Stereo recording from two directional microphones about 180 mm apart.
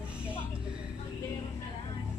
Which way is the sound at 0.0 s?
5° right (ahead or behind).